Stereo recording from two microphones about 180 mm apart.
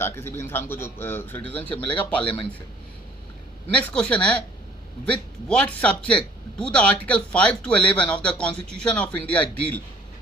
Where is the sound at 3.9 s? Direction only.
5° left (ahead or behind).